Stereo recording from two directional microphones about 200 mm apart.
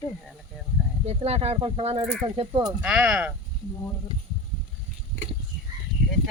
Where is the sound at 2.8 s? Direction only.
5° right (ahead or behind).